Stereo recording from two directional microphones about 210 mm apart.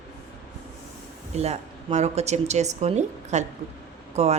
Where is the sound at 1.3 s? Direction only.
30° right (ahead or behind).